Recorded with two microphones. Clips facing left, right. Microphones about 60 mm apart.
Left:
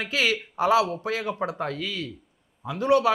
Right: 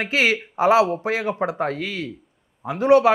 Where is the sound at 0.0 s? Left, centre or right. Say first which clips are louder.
Right 5 dB; right.